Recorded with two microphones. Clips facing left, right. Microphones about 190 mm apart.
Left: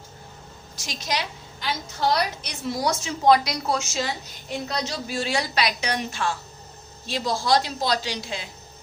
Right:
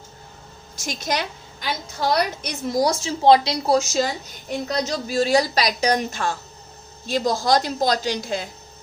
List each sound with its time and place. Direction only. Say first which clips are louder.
0.8 s a woman's voice: right 4 dB; 50° right (ahead or behind)